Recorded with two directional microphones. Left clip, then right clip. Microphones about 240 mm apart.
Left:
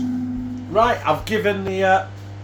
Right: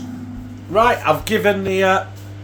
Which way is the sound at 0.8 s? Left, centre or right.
Right.